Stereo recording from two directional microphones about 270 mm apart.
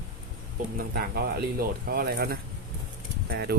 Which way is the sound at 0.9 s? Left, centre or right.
Right.